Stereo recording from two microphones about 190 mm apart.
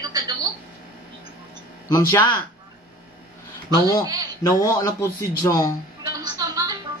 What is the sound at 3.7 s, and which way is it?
Speech, 20° left (ahead or behind).